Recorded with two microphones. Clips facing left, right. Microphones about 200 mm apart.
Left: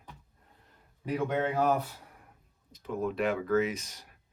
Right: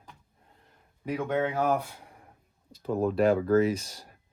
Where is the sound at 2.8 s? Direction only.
35° right (ahead or behind).